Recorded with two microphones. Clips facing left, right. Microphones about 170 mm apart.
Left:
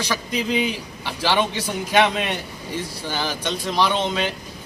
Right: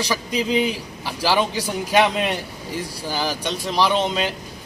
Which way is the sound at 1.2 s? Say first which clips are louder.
Right 1 dB; 5° right (ahead or behind).